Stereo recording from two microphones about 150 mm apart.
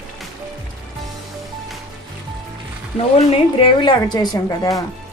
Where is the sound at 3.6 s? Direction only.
30° left (ahead or behind).